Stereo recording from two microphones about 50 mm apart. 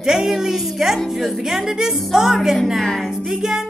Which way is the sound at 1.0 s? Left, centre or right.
Centre.